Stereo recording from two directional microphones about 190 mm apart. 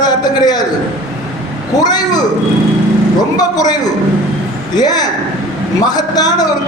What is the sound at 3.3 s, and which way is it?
Speech, 20° left (ahead or behind).